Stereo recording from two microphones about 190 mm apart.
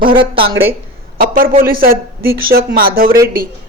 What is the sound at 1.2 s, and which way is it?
Speech, 45° right (ahead or behind).